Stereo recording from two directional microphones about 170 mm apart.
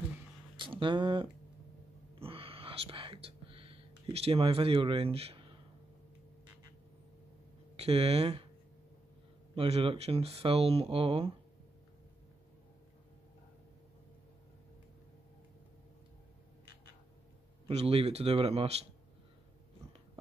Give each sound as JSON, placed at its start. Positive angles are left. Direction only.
{"t": 0.6, "sound": "speech", "side_deg": -30}
{"t": 2.1, "sound": "whispering", "side_deg": -35}
{"t": 7.7, "sound": "speech", "side_deg": -35}
{"t": 9.6, "sound": "speech", "side_deg": -35}
{"t": 17.6, "sound": "speech", "side_deg": -35}